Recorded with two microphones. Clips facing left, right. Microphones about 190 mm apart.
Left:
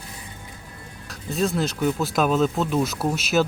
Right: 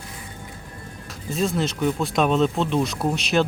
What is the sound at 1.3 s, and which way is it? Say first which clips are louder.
Speech: even; centre (ahead or behind).